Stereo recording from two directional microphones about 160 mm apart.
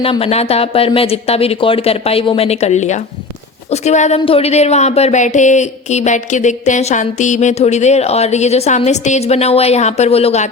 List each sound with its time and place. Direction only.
0.0 s speech: 35° left (ahead or behind)